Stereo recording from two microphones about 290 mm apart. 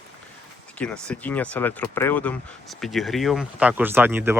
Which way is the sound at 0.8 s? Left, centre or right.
Centre.